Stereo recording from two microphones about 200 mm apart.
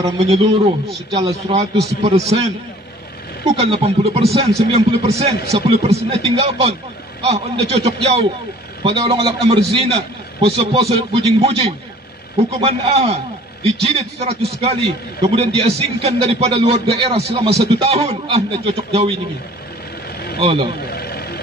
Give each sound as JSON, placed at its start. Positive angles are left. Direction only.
{"t": 1.1, "sound": "a man's voice", "side_deg": -30}
{"t": 3.4, "sound": "a man's voice", "side_deg": -30}
{"t": 20.3, "sound": "speech", "side_deg": -30}
{"t": 20.9, "sound": "vehicle", "side_deg": 50}